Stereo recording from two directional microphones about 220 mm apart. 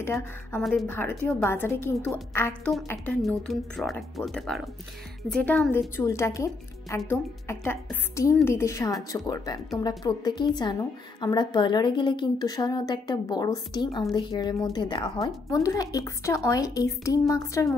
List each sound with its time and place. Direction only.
0.0 s a woman's voice: 10° left (ahead or behind)
0.6 s a woman's voice: centre (ahead or behind)